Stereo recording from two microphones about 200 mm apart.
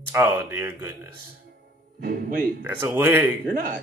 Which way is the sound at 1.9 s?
45° right (ahead or behind).